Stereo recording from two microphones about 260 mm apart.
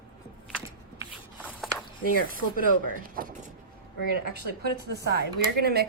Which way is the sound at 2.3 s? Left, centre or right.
Right.